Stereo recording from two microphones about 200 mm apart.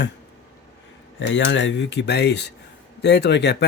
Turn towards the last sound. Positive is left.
turn(degrees=60)  # may be behind; listen again after turning